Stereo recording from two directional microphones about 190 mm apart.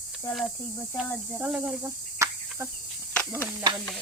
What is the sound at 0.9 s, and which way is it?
Speech, 5° left (ahead or behind).